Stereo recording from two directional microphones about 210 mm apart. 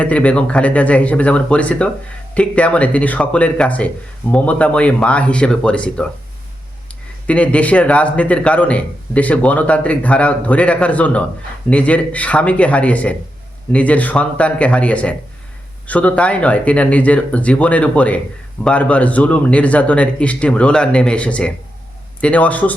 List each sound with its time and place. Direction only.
0.0 s a man's voice: 5° left (ahead or behind)
7.3 s a man's voice: 5° left (ahead or behind)